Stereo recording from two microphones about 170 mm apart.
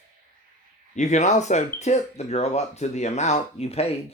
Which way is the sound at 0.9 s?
45° left (ahead or behind).